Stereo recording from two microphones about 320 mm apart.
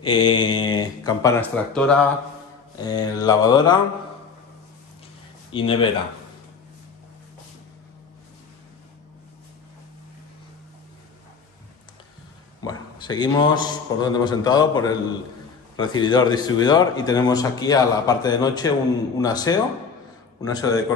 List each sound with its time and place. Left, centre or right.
0.0 s a man's voice: centre
5.5 s a man's voice: centre
12.6 s a man's voice: centre